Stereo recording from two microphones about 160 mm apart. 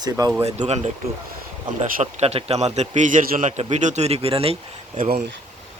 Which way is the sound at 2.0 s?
40° right (ahead or behind).